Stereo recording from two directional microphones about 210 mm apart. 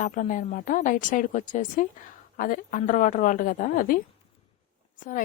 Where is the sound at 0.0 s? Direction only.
35° left (ahead or behind).